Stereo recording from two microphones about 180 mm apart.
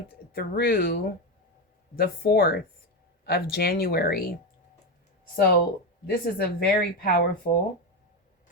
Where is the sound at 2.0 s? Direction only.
60° left (ahead or behind).